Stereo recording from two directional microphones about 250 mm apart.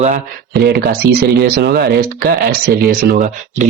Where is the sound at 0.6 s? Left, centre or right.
Right.